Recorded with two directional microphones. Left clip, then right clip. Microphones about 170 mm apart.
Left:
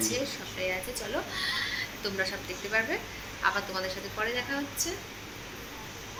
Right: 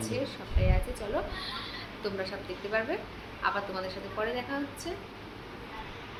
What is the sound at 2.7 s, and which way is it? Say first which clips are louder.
Speech: left 2 dB; centre (ahead or behind).